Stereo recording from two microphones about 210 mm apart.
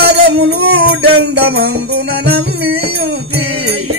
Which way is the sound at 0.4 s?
90° right.